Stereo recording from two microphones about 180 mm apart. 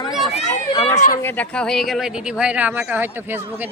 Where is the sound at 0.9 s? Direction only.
40° left (ahead or behind).